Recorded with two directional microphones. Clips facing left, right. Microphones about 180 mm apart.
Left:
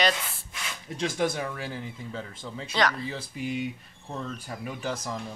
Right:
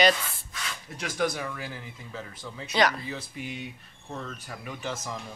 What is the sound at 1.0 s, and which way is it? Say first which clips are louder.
Speech: left 2 dB; 25° left (ahead or behind).